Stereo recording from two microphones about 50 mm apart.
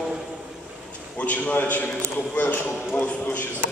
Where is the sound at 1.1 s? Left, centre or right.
Left.